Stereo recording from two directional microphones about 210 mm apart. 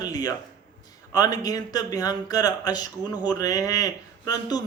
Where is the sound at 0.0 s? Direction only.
20° left (ahead or behind).